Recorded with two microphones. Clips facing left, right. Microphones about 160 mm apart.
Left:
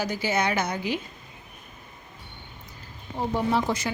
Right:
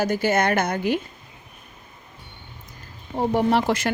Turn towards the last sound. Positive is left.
turn(degrees=-90)